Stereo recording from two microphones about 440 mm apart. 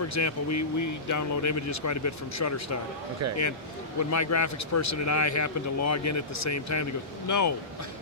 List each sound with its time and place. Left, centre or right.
0.1 s speech: left
4.1 s speech: left